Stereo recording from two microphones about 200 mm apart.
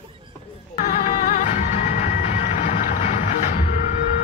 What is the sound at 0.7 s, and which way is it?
Music, 40° left (ahead or behind).